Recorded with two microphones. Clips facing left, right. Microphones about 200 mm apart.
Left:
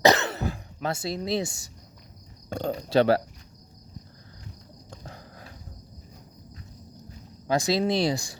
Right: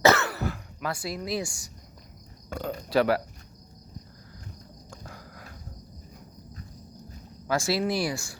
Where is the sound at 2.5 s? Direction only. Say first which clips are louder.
Left 2 dB; 30° left (ahead or behind).